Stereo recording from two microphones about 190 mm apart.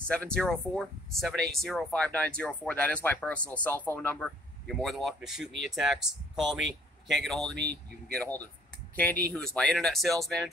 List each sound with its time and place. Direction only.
0.1 s speech: 5° left (ahead or behind)
7.5 s speech: 60° right (ahead or behind)
8.1 s speech: 5° left (ahead or behind)